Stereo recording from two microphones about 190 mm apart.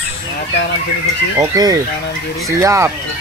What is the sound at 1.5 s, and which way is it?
Speech, 20° right (ahead or behind).